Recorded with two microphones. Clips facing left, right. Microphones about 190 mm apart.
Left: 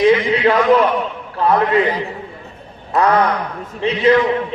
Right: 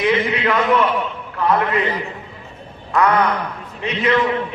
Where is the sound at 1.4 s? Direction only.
30° left (ahead or behind).